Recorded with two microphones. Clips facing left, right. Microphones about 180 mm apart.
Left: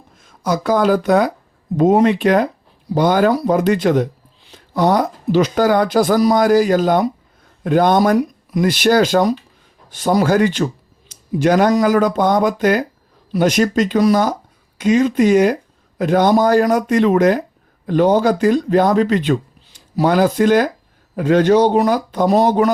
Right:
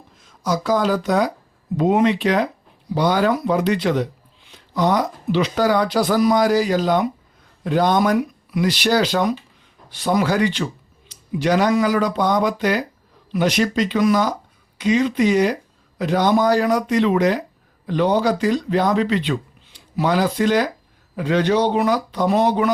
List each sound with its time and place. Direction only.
0.4 s speech: 55° left (ahead or behind)
1.7 s speech: 40° left (ahead or behind)